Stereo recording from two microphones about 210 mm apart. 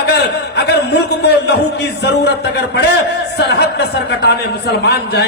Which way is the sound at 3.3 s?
50° left (ahead or behind).